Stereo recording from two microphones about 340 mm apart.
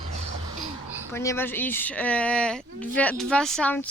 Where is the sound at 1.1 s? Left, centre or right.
Centre.